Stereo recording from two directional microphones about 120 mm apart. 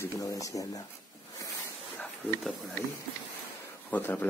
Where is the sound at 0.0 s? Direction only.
25° left (ahead or behind).